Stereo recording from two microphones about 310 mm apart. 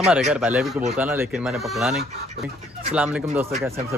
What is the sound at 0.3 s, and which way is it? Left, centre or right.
Speech, centre.